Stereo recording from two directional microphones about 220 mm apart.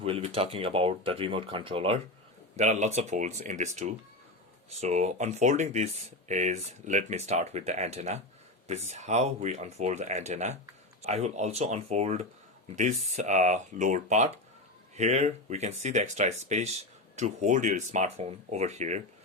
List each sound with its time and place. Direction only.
0.0 s speech: 25° right (ahead or behind)